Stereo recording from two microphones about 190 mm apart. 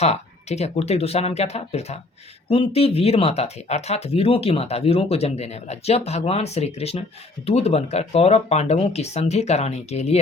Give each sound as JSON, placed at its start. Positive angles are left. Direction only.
{"t": 0.0, "sound": "speech", "side_deg": 35}